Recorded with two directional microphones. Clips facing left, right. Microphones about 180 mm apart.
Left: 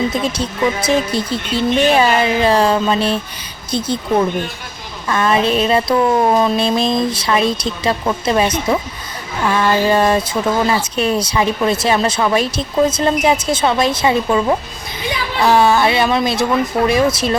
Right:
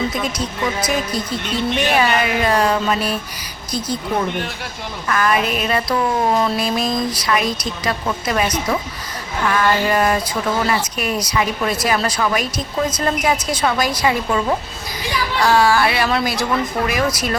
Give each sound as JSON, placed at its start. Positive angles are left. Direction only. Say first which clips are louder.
{"t": 0.1, "sound": "speech", "louder": "left 4 dB", "side_deg": 30}
{"t": 5.0, "sound": "speech", "louder": "left 3 dB", "side_deg": 25}